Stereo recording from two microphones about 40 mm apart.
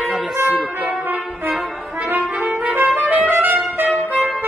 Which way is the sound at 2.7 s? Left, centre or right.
Right.